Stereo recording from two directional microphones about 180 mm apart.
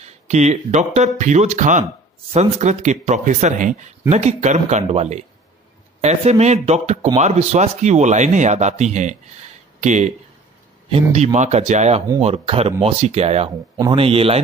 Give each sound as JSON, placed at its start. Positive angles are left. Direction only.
{"t": 0.0, "sound": "speech", "side_deg": -40}